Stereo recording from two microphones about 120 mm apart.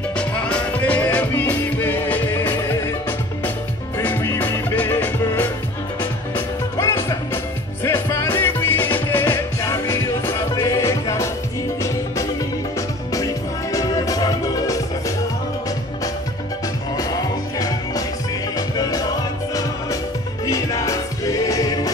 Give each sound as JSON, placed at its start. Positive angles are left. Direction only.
{"t": 0.2, "sound": "music", "side_deg": 10}
{"t": 4.0, "sound": "music", "side_deg": 20}
{"t": 13.1, "sound": "music", "side_deg": 30}
{"t": 17.6, "sound": "music", "side_deg": 30}